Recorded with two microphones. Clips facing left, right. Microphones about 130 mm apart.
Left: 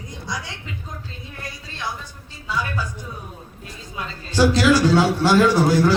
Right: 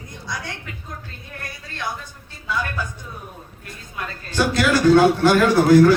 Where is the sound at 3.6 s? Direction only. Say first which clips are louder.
Even; 55° right (ahead or behind).